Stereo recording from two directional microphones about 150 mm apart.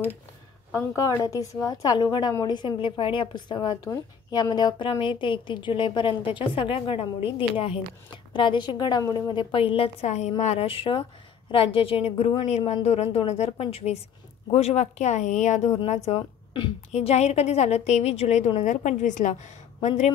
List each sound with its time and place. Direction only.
0.7 s a woman's voice: 20° left (ahead or behind); by 16.2 s 45° left (ahead or behind)
16.2 s speech: 35° left (ahead or behind)
16.9 s a woman's voice: 45° left (ahead or behind)